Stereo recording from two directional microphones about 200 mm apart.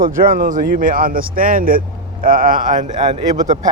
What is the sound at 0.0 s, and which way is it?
A man's voice, 40° right (ahead or behind).